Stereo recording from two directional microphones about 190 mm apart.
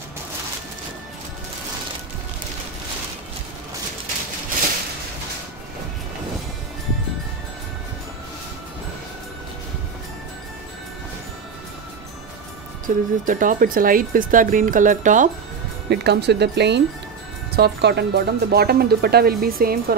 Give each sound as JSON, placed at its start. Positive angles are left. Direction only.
{"t": 12.8, "sound": "speech", "side_deg": -45}
{"t": 15.9, "sound": "speech", "side_deg": -60}